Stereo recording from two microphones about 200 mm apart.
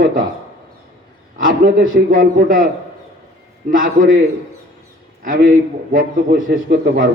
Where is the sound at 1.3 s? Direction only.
45° right (ahead or behind).